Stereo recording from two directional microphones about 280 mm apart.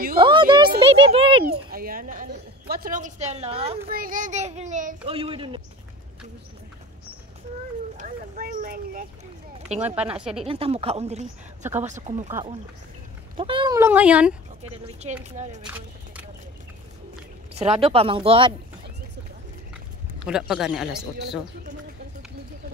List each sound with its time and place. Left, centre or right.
0.2 s a sound: centre
0.7 s a woman's voice: centre
1.4 s a woman's voice: right
8.0 s speech: right
10.1 s speech: centre
10.4 s a woman's voice: right
12.3 s speech: centre
15.3 s a woman's voice: right
15.6 s speech: centre
17.6 s a woman's voice: right
20.2 s speech: centre